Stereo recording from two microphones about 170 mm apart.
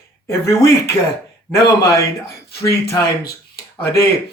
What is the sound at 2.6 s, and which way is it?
Speech, 65° left (ahead or behind).